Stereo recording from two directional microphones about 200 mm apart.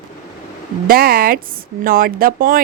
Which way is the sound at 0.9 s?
50° right (ahead or behind).